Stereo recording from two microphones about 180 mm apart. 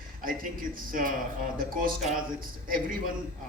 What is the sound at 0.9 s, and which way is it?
Speech, 50° right (ahead or behind).